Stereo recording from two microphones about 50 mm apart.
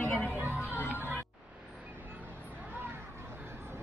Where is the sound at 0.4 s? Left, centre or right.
Right.